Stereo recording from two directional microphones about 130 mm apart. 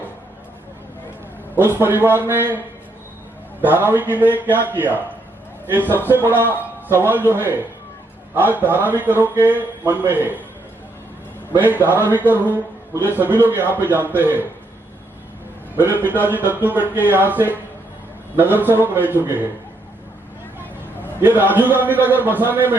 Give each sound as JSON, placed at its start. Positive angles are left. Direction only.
{"t": 1.5, "sound": "a man's voice", "side_deg": -15}
{"t": 3.6, "sound": "a man's voice", "side_deg": -15}
{"t": 11.6, "sound": "a man's voice", "side_deg": -15}
{"t": 15.8, "sound": "a man's voice", "side_deg": -15}
{"t": 20.6, "sound": "a man's voice", "side_deg": -15}